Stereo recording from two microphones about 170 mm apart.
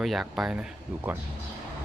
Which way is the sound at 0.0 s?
Centre (ahead or behind).